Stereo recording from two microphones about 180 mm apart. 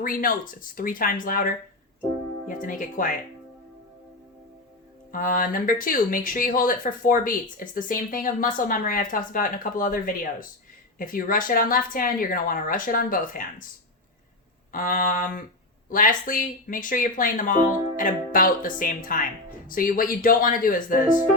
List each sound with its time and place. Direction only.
0.0 s speech: 50° left (ahead or behind)
5.1 s speech: 50° left (ahead or behind)
14.7 s speech: 50° left (ahead or behind)